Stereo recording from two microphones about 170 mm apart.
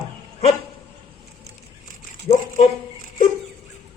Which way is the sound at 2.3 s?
20° left (ahead or behind).